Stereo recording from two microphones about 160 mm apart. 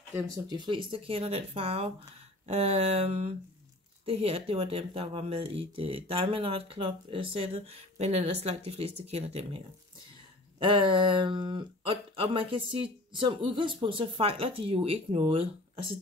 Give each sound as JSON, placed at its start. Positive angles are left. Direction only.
{"t": 0.1, "sound": "speech", "side_deg": -20}
{"t": 10.6, "sound": "speech", "side_deg": -30}